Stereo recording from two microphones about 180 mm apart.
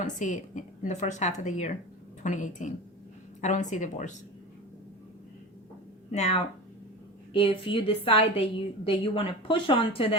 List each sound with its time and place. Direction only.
0.0 s a woman's voice: 45° left (ahead or behind)
6.1 s a woman's voice: 35° left (ahead or behind)